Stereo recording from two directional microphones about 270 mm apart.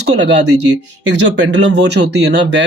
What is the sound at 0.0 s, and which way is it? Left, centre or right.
Speech, right.